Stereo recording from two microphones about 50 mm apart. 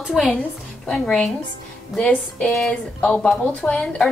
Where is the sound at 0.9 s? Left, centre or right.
Centre.